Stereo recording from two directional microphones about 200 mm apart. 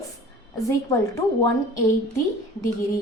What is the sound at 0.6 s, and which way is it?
Speech, 15° left (ahead or behind).